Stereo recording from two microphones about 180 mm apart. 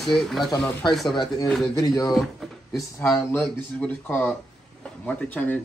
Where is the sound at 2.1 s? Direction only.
Centre (ahead or behind).